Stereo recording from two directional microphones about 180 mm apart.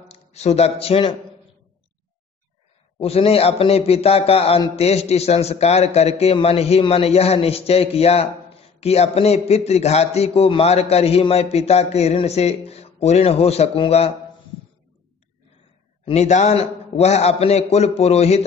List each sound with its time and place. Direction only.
0.1 s speech: 35° left (ahead or behind)
3.0 s a man's voice: 35° left (ahead or behind)
16.1 s a man's voice: 40° left (ahead or behind)